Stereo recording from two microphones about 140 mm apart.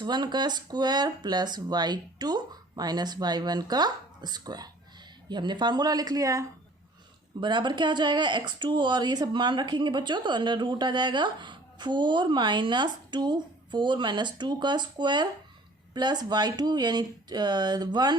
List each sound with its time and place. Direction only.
0.0 s speech: 30° right (ahead or behind)
7.4 s speech: 35° right (ahead or behind)